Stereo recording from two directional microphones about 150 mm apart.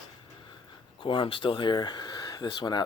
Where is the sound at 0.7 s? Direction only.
35° left (ahead or behind).